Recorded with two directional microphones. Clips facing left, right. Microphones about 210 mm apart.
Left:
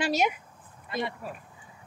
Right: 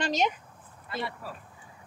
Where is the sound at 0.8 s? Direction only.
20° left (ahead or behind).